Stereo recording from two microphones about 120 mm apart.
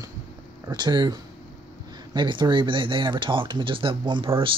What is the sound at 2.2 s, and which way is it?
Speech, 40° right (ahead or behind).